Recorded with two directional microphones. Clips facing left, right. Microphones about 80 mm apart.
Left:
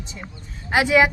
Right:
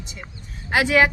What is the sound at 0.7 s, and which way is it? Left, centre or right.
Speech, left.